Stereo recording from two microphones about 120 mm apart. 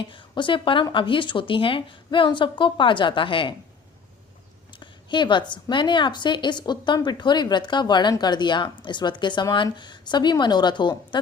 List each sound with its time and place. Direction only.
0.0 s a woman's voice: 45° left (ahead or behind)
4.7 s a woman's voice: 40° left (ahead or behind)